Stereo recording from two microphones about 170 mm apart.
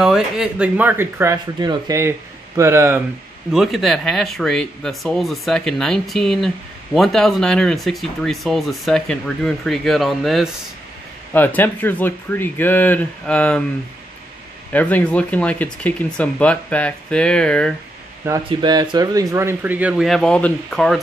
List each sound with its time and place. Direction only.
0.0 s speech: 5° right (ahead or behind)
3.5 s speech: centre (ahead or behind)
11.3 s speech: 10° left (ahead or behind)
14.7 s speech: 10° left (ahead or behind)
18.5 s speech: 25° right (ahead or behind); by 21.0 s 5° left (ahead or behind)